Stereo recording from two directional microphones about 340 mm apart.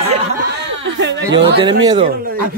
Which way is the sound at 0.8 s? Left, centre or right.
Right.